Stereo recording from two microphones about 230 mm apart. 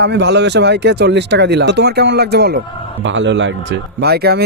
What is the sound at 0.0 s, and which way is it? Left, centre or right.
Speech, right.